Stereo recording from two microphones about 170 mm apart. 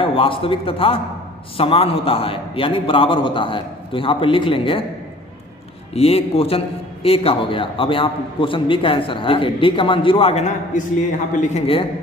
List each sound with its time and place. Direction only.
0.0 s a man's voice: 30° left (ahead or behind)
5.9 s a man's voice: 35° left (ahead or behind)